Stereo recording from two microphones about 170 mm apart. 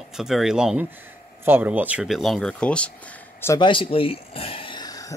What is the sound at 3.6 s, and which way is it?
Speech, 30° left (ahead or behind).